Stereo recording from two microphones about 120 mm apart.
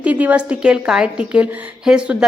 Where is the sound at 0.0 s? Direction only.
10° right (ahead or behind).